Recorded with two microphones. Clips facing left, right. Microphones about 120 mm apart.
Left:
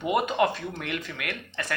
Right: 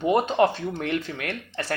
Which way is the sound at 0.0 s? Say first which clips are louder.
Right 4 dB; 35° right (ahead or behind).